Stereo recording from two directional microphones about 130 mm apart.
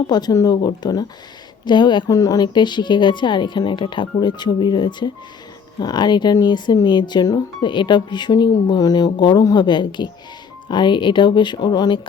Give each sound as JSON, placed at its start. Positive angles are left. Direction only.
{"t": 0.1, "sound": "speech", "side_deg": 30}